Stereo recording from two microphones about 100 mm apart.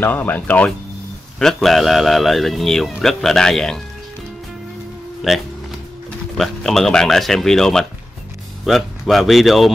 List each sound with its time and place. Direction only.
0.0 s speech: 20° left (ahead or behind)
1.4 s a man's voice: 5° left (ahead or behind)
5.2 s a man's voice: centre (ahead or behind)